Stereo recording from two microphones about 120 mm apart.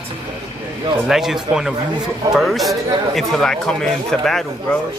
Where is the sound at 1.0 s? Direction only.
Centre (ahead or behind).